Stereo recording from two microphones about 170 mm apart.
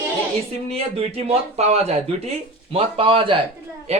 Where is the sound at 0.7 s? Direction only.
35° right (ahead or behind).